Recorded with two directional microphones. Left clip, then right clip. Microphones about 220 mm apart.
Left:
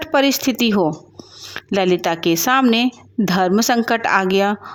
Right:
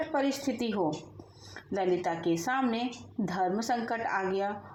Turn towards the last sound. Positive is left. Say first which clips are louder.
# left 14 dB
turn(degrees=40)  # may be behind; listen again after turning